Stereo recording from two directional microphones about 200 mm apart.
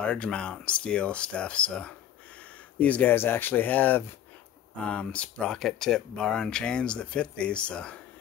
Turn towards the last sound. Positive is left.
turn(degrees=5)  # may be behind; listen again after turning